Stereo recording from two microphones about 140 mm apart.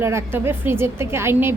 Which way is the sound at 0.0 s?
20° right (ahead or behind).